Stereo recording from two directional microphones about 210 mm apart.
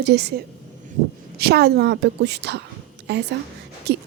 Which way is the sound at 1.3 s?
50° right (ahead or behind).